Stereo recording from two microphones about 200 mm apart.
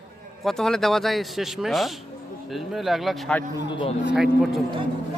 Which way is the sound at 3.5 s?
25° left (ahead or behind).